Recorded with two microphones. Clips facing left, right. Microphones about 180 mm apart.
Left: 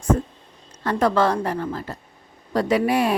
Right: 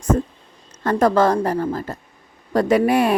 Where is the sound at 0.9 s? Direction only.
45° right (ahead or behind).